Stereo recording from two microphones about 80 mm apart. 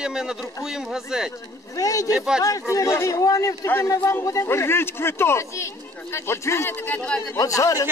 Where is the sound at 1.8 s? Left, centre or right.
Left.